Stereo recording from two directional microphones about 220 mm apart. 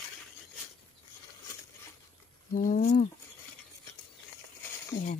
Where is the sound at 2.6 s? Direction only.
40° left (ahead or behind).